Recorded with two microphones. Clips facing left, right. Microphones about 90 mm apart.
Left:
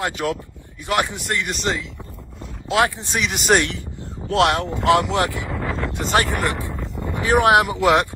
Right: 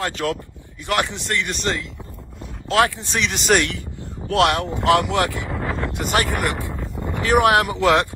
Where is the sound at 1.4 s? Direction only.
Centre (ahead or behind).